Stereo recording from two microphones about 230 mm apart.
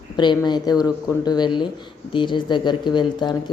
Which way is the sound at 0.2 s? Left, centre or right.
Centre.